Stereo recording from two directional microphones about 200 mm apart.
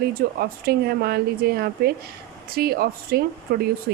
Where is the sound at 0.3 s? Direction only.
50° right (ahead or behind).